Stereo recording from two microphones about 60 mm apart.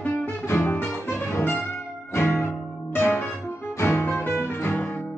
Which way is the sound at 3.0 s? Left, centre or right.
Left.